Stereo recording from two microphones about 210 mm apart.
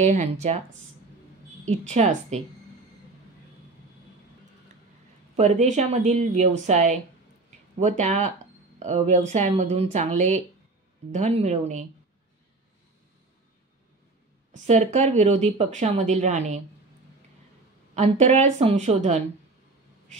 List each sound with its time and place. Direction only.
0.0 s speech: 35° right (ahead or behind)
1.7 s speech: 30° right (ahead or behind)
5.3 s speech: 35° right (ahead or behind)
14.5 s speech: 35° right (ahead or behind)
17.9 s speech: 35° right (ahead or behind)